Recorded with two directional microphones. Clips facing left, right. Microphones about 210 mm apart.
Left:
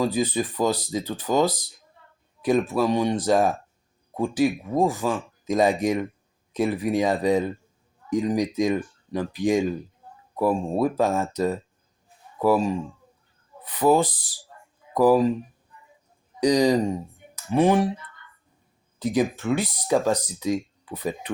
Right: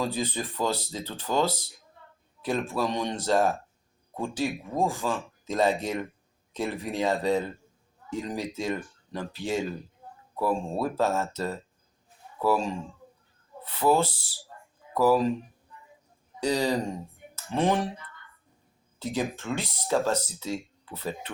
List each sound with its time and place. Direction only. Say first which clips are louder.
0.0 s speech: left 6 dB; 10° left (ahead or behind)
16.4 s speech: left 7 dB; 15° left (ahead or behind)
18.9 s speech: left 7 dB; 15° left (ahead or behind)